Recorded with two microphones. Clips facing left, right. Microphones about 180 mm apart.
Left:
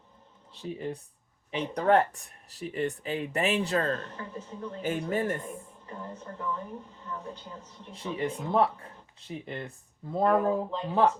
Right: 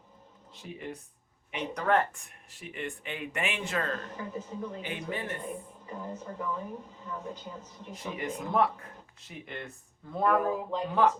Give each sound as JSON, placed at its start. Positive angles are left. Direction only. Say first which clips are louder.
{"t": 0.6, "sound": "speech", "louder": "left 6 dB", "side_deg": 35}
{"t": 4.2, "sound": "a woman's voice", "louder": "right 2 dB", "side_deg": -10}
{"t": 4.8, "sound": "speech", "louder": "left 7 dB", "side_deg": 45}
{"t": 5.5, "sound": "a woman's voice", "louder": "right 2 dB", "side_deg": -10}
{"t": 8.1, "sound": "speech", "louder": "left 3 dB", "side_deg": 30}